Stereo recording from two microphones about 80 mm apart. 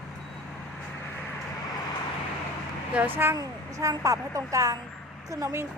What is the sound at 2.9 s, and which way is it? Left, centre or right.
Speech, right.